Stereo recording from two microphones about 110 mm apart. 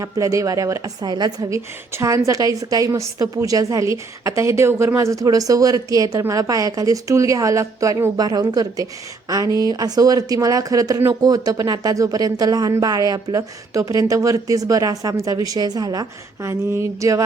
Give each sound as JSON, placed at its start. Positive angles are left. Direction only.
{"t": 0.0, "sound": "speech", "side_deg": -30}